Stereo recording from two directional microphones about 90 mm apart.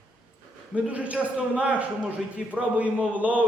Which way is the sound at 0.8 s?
15° right (ahead or behind).